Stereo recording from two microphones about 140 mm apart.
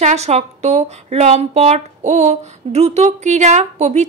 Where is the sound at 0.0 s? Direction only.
50° right (ahead or behind).